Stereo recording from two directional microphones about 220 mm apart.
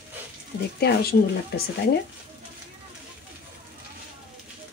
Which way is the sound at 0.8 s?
45° left (ahead or behind).